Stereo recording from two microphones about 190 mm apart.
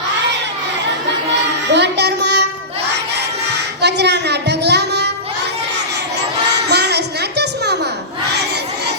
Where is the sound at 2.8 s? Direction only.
60° right (ahead or behind).